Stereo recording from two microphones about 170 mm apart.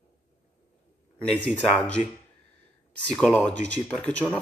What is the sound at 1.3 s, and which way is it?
Speech, 85° right.